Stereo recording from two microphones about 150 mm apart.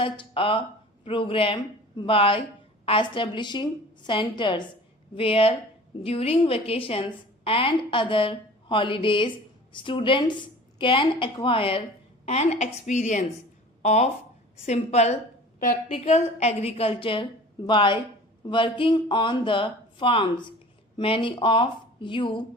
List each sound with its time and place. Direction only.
0.0 s a woman's voice: 35° left (ahead or behind)